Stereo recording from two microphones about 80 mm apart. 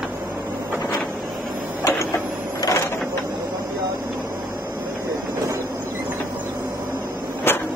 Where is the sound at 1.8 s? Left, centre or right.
Left.